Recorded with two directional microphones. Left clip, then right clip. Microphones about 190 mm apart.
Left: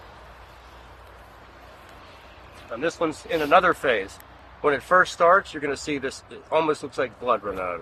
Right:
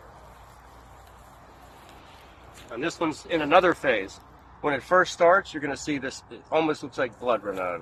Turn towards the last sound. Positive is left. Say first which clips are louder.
# left 2 dB
turn(degrees=0)  # may be behind; listen again after turning